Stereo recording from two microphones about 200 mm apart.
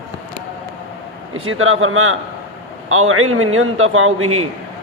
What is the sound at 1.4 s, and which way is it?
A man's voice, 90° right.